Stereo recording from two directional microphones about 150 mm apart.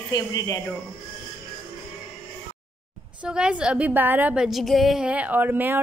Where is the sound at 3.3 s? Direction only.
5° right (ahead or behind).